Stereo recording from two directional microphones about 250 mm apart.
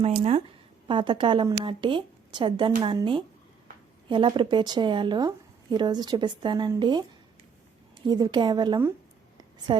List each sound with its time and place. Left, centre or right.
0.0 s a woman's voice: right
8.0 s a woman's voice: centre